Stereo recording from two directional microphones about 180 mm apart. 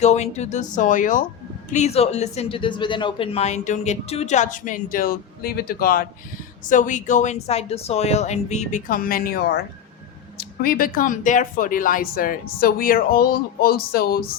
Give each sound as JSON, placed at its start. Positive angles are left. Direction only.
{"t": 0.0, "sound": "speech", "side_deg": 40}
{"t": 6.7, "sound": "speech", "side_deg": 45}